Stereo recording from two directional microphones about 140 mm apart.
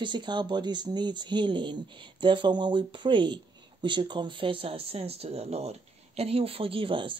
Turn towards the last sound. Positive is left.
turn(degrees=-35)  # may be behind; listen again after turning